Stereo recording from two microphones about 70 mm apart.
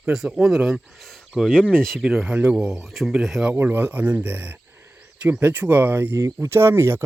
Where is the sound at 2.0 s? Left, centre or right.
Centre.